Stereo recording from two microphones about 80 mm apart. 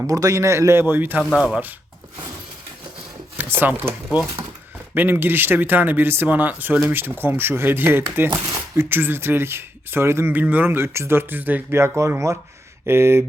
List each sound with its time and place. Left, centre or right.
0.1 s speech: right
1.2 s speech: centre
3.3 s speech: right
10.3 s speech: right
11.8 s speech: right